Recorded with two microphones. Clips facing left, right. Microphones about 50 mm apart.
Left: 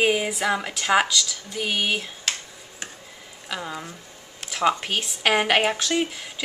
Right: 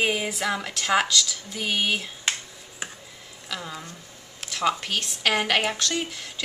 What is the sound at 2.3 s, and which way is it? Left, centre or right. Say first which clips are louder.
Finger snapping: right 3 dB; centre.